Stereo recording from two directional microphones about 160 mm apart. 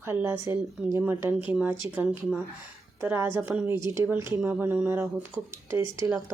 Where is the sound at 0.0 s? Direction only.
15° right (ahead or behind).